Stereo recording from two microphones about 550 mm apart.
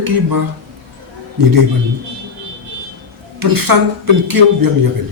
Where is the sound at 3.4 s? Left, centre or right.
Right.